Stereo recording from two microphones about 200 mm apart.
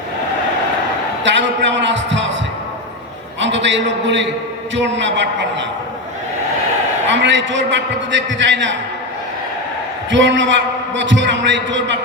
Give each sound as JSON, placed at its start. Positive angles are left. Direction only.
{"t": 1.2, "sound": "a man's voice", "side_deg": -65}
{"t": 3.4, "sound": "a man's voice", "side_deg": -65}
{"t": 7.1, "sound": "a man's voice", "side_deg": -65}
{"t": 10.1, "sound": "a man's voice", "side_deg": -65}